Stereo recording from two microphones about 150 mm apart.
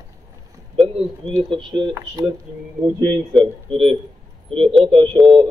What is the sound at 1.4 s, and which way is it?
Speech, 35° right (ahead or behind).